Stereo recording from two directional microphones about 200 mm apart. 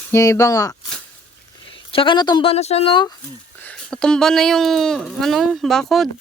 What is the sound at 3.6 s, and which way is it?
Speech, 5° left (ahead or behind).